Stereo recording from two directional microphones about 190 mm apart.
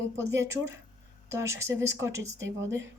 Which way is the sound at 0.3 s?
15° right (ahead or behind).